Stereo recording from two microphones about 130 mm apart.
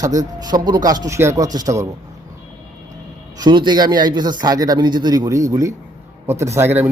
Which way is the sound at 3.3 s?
35° right (ahead or behind).